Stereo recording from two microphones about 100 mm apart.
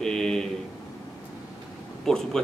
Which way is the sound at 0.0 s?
5° left (ahead or behind).